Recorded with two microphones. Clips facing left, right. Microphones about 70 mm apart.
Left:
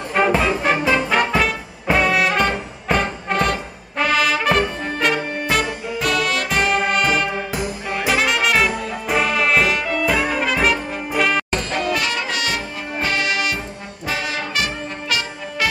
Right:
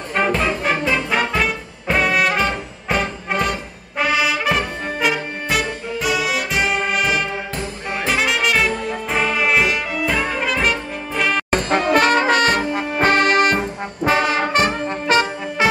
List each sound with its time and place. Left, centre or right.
0.1 s music: centre
4.0 s brass instrument: centre
10.0 s music: centre
11.5 s brass instrument: right
15.6 s music: right